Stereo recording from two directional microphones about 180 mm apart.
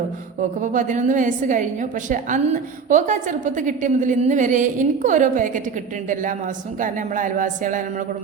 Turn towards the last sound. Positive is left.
turn(degrees=-45)  # may be behind; listen again after turning